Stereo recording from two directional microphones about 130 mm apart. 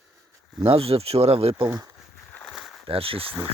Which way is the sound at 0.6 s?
45° right (ahead or behind).